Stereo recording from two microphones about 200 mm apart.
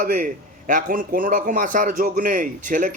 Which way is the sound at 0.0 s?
45° right (ahead or behind).